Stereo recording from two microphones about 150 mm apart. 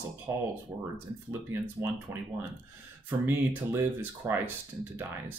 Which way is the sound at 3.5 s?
15° right (ahead or behind).